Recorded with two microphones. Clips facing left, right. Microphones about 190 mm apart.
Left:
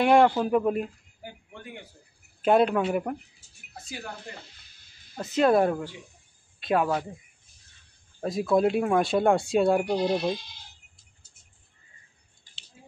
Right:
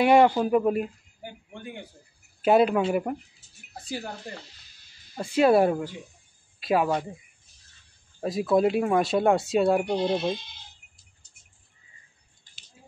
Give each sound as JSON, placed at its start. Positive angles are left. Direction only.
{"t": 0.0, "sound": "speech", "side_deg": -5}
{"t": 1.2, "sound": "a sound", "side_deg": -25}
{"t": 2.4, "sound": "speech", "side_deg": -5}
{"t": 3.8, "sound": "speech", "side_deg": -35}
{"t": 5.1, "sound": "speech", "side_deg": -10}
{"t": 8.2, "sound": "speech", "side_deg": 0}